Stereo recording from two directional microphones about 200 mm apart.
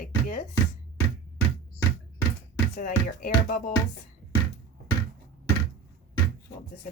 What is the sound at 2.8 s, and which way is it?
Speech, 45° left (ahead or behind).